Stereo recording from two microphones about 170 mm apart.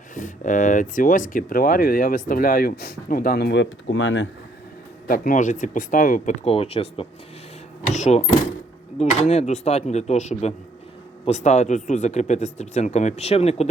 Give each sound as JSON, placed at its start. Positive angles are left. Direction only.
{"t": 0.1, "sound": "speech", "side_deg": 50}
{"t": 5.0, "sound": "speech", "side_deg": 55}
{"t": 6.4, "sound": "speech", "side_deg": 35}